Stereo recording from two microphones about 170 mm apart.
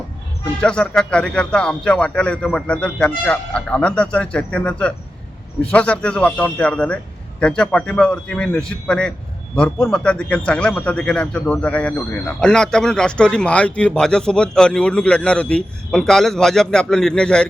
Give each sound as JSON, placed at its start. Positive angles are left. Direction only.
{"t": 0.6, "sound": "a man's voice", "side_deg": 5}